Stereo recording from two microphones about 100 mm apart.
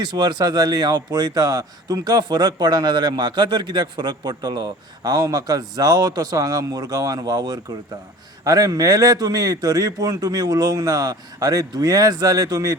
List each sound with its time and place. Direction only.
0.0 s speech: 45° right (ahead or behind)